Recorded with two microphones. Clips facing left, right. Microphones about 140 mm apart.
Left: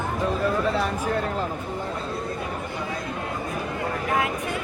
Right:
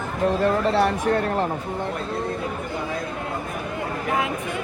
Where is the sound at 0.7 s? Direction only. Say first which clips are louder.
Right 5 dB; 70° right (ahead or behind).